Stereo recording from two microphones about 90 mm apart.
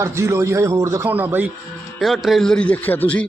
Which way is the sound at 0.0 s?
30° right (ahead or behind).